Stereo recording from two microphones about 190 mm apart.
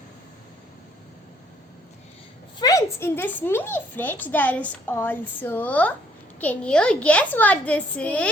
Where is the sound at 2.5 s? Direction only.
20° left (ahead or behind).